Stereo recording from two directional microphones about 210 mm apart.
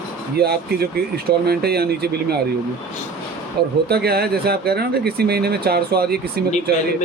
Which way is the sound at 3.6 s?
50° right (ahead or behind).